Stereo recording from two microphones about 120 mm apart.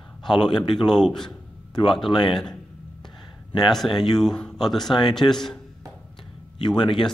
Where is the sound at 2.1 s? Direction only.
40° left (ahead or behind).